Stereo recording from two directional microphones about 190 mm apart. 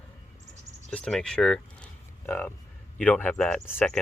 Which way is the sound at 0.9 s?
5° left (ahead or behind).